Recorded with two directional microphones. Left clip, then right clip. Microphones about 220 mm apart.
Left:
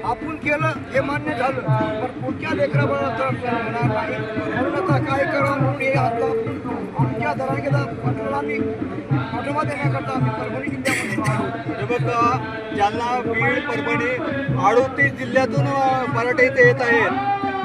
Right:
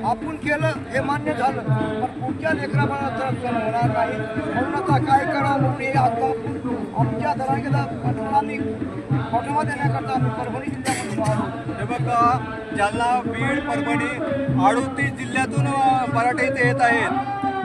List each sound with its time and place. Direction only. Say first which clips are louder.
0.6 s a man's voice: left 2 dB; 25° right (ahead or behind)
4.9 s a man's voice: right 2 dB; 20° right (ahead or behind)
11.9 s speech: even; centre (ahead or behind)
14.6 s speech: left 4 dB; 5° right (ahead or behind)